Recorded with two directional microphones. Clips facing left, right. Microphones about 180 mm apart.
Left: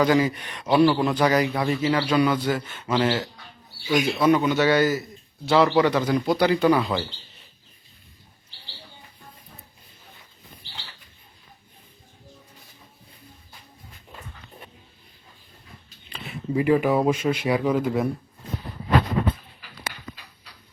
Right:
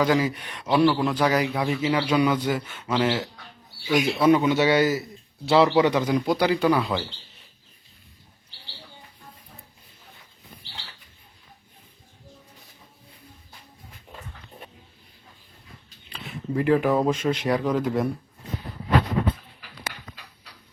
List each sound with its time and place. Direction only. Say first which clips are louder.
0.0 s a man's voice: left 2 dB; 5° right (ahead or behind)
2.6 s speech: left 1 dB; centre (ahead or behind)
4.3 s a man's voice: right 1 dB; 25° right (ahead or behind); by 7.0 s centre (ahead or behind)
16.0 s speech: left 1 dB; centre (ahead or behind)